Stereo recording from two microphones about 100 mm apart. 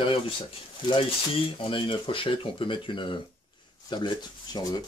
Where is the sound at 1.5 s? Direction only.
60° left (ahead or behind).